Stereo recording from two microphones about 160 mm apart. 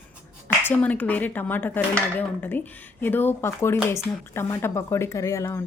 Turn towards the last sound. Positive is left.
turn(degrees=20)  # may be behind; listen again after turning